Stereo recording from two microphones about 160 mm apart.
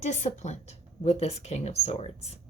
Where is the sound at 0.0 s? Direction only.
45° left (ahead or behind).